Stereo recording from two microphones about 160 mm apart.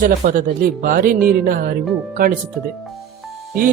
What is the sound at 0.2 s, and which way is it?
A man's voice, 55° right (ahead or behind).